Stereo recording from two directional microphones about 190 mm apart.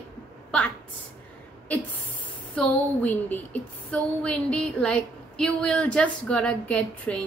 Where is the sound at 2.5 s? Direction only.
5° left (ahead or behind).